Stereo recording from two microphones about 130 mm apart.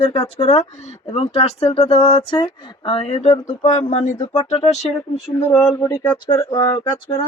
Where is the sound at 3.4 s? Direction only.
75° left (ahead or behind).